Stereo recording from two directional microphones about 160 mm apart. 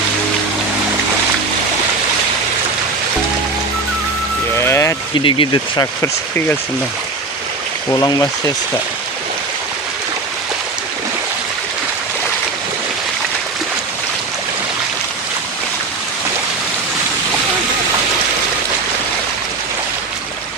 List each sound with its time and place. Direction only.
4.6 s music: 15° left (ahead or behind)
5.1 s speech: 30° left (ahead or behind)
5.8 s speech: 15° left (ahead or behind)
7.9 s speech: 20° left (ahead or behind)